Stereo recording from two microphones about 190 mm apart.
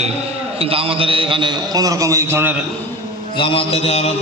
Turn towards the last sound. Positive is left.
turn(degrees=35)  # may be behind; listen again after turning